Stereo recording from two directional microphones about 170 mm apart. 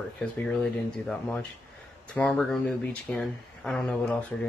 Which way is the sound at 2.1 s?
5° left (ahead or behind).